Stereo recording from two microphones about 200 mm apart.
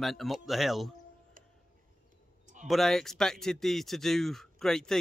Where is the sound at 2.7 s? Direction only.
Centre (ahead or behind).